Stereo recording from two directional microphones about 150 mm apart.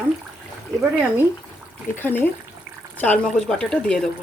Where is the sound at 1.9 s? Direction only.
15° left (ahead or behind).